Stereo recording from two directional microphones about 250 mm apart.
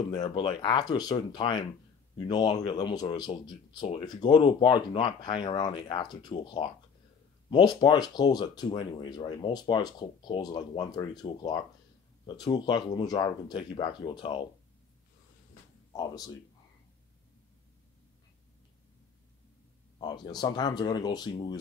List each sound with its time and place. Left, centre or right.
0.1 s speech: centre
15.9 s speech: centre
20.0 s speech: centre